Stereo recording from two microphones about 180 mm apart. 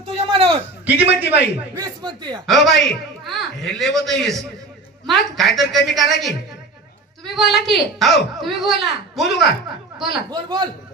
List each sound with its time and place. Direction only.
0.3 s a sound: 30° right (ahead or behind)
0.8 s a man's voice: 10° right (ahead or behind)
1.8 s speech: 25° right (ahead or behind)
2.4 s speech: centre (ahead or behind)
10.3 s speech: 20° right (ahead or behind)